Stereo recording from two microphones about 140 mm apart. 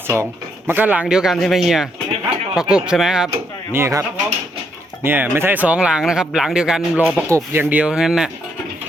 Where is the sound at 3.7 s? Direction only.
20° right (ahead or behind).